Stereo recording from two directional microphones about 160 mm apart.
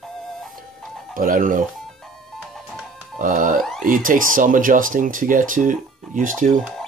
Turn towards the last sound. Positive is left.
turn(degrees=-55)  # may be behind; listen again after turning